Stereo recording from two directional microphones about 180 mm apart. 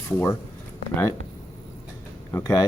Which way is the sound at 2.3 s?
20° left (ahead or behind).